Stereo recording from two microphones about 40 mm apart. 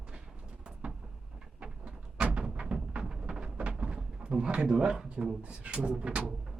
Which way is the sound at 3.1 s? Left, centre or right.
Centre.